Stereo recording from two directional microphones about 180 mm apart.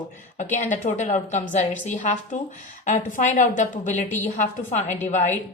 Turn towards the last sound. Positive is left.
turn(degrees=40)  # may be behind; listen again after turning